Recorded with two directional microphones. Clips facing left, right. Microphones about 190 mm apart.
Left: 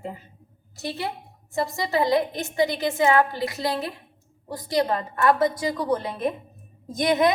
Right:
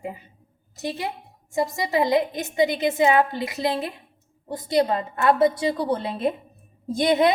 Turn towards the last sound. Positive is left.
turn(degrees=-30)  # may be behind; listen again after turning